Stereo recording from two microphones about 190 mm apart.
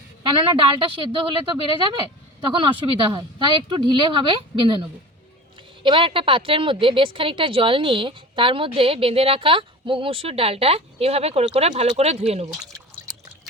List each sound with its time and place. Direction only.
0.2 s a woman's voice: 25° right (ahead or behind)
2.5 s a woman's voice: 25° right (ahead or behind)